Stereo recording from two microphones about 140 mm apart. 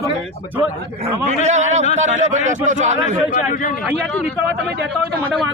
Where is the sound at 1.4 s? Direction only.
55° right (ahead or behind).